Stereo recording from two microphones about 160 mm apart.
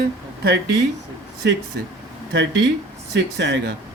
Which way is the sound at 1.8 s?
90° right.